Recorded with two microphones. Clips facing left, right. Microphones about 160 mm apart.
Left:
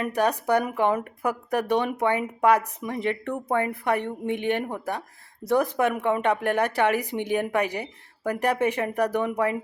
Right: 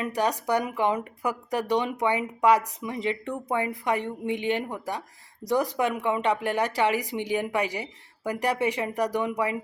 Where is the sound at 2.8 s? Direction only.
55° left (ahead or behind).